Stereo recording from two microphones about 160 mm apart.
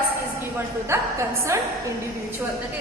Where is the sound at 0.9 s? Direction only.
20° right (ahead or behind).